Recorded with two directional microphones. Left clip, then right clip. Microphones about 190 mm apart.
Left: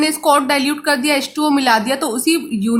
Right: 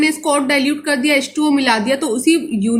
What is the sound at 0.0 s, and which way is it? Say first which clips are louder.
A woman's voice: left 2 dB; 35° left (ahead or behind).